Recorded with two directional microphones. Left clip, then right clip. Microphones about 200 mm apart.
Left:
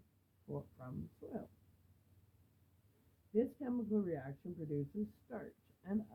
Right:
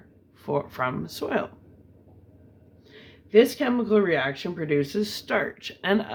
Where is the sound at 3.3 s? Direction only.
10° right (ahead or behind).